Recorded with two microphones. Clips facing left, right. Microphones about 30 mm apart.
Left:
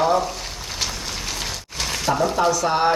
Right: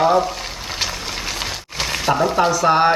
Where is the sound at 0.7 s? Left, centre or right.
Right.